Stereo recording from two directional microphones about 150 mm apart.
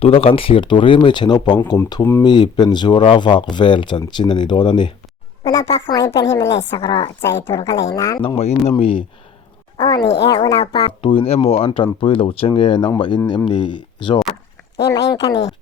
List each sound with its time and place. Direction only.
0.0 s speech: 40° left (ahead or behind)
5.9 s speech: 25° left (ahead or behind)
8.2 s speech: 40° left (ahead or behind)
9.8 s speech: 25° left (ahead or behind)